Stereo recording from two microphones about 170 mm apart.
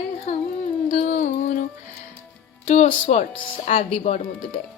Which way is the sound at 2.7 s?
35° left (ahead or behind).